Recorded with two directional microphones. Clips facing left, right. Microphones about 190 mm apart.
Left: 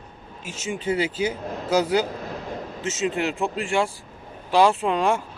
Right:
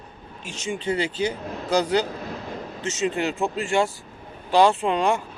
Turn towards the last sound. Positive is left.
turn(degrees=0)  # may be behind; listen again after turning